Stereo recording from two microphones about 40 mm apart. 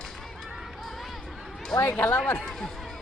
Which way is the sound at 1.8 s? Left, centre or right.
Left.